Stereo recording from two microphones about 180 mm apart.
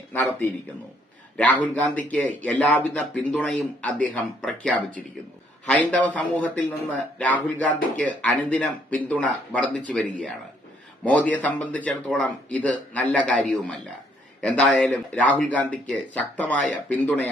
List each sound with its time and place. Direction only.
0.1 s speech: 10° left (ahead or behind)
1.7 s speech: 10° left (ahead or behind)